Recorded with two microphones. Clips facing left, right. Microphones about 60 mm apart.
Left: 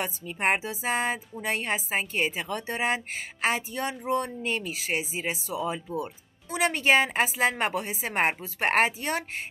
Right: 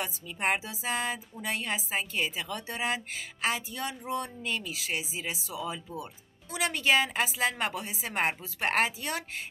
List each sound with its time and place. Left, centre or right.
0.0 s a woman's voice: left